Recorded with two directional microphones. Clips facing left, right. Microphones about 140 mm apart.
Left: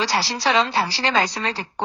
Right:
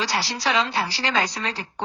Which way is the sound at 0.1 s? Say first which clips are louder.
Left 3 dB; 30° left (ahead or behind).